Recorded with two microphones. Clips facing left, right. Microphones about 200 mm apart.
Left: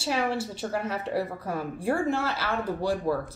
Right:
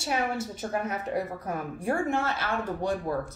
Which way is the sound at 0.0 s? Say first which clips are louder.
Left 2 dB; 30° left (ahead or behind).